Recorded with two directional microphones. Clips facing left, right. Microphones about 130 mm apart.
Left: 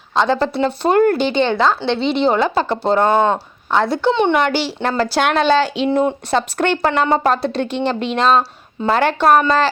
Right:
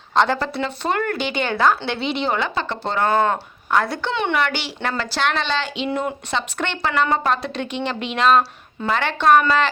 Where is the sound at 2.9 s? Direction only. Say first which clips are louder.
Left 3 dB; 25° left (ahead or behind); by 6.9 s 45° left (ahead or behind).